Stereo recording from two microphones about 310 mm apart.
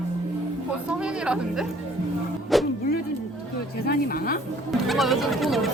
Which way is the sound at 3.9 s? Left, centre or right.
Left.